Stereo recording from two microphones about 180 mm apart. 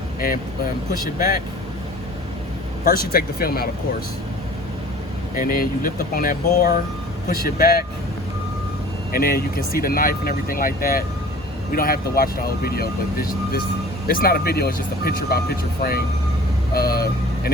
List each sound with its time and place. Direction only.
2.8 s speech: 55° left (ahead or behind)
5.3 s speech: 50° left (ahead or behind)
9.1 s speech: 55° left (ahead or behind)